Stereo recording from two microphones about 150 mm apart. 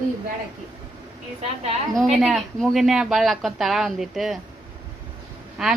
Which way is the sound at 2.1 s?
Centre (ahead or behind).